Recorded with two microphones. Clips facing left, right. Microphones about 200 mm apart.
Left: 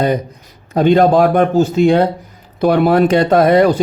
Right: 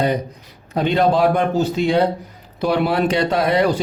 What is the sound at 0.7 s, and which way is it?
Speech, 45° left (ahead or behind).